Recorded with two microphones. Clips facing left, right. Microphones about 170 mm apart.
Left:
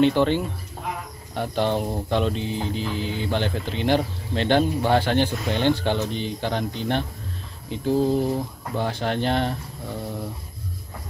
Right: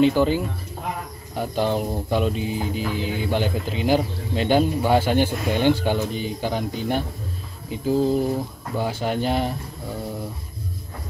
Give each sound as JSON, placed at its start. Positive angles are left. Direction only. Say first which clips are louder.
{"t": 0.0, "sound": "speech", "louder": "right 1 dB", "side_deg": -5}